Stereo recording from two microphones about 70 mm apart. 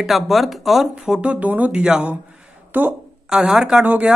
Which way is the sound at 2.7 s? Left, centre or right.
Right.